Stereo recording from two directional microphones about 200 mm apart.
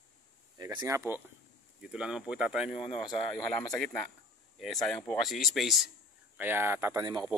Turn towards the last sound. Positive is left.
turn(degrees=-15)  # may be behind; listen again after turning